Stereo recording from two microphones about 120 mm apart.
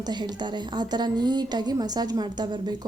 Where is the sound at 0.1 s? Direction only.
40° right (ahead or behind).